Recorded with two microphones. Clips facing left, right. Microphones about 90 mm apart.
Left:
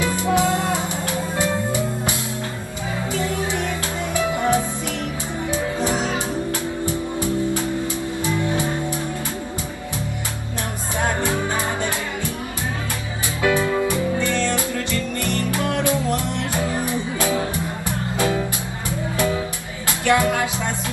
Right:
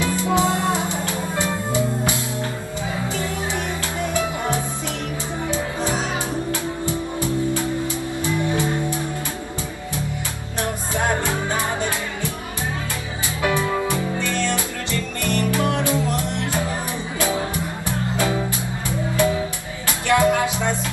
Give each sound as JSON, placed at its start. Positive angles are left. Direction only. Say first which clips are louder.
{"t": 0.3, "sound": "music", "louder": "left 1 dB", "side_deg": -20}
{"t": 15.3, "sound": "music", "louder": "right 3 dB", "side_deg": -20}
{"t": 20.1, "sound": "music", "louder": "right 1 dB", "side_deg": -20}